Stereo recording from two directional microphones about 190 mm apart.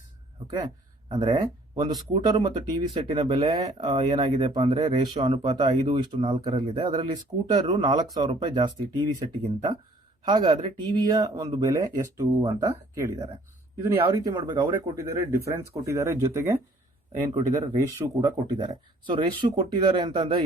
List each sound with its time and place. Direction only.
0.4 s speech: 25° right (ahead or behind)